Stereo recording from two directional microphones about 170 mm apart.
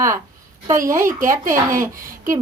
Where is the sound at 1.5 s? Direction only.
55° right (ahead or behind).